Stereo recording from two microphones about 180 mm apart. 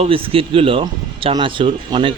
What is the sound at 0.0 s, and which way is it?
A man's voice, 30° right (ahead or behind).